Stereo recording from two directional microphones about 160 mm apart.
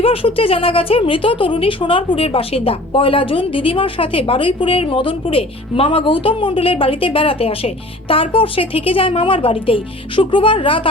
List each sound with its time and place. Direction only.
0.0 s speech: 35° left (ahead or behind)